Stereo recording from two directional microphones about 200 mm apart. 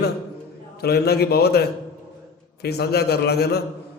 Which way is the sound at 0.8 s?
50° left (ahead or behind).